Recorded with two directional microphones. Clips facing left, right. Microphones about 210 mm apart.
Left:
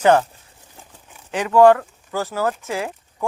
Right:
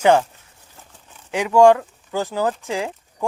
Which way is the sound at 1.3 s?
15° right (ahead or behind).